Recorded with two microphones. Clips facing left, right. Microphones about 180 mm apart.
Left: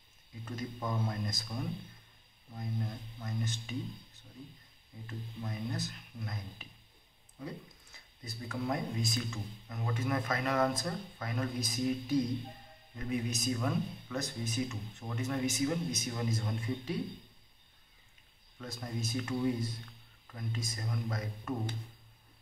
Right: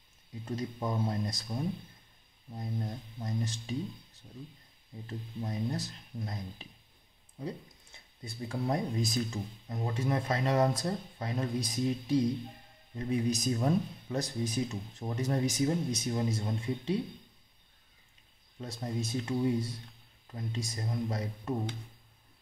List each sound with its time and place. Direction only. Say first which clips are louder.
1.0 s speech: right 4 dB; 35° right (ahead or behind)
5.0 s speech: right 3 dB; 35° right (ahead or behind)
18.6 s speech: right 4 dB; 30° right (ahead or behind)